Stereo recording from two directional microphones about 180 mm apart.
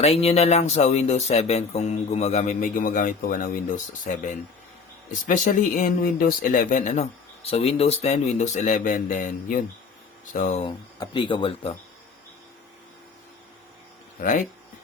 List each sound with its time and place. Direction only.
0.0 s speech: 35° left (ahead or behind); by 3.6 s 50° left (ahead or behind)
5.1 s speech: 45° left (ahead or behind)
14.2 s speech: 45° left (ahead or behind)